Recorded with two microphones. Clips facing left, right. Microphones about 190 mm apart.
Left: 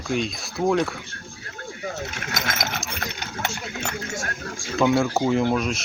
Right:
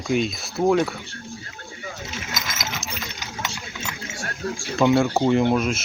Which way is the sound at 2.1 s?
60° left (ahead or behind).